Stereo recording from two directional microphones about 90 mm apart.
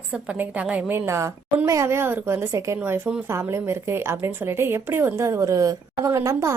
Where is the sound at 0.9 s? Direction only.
30° right (ahead or behind).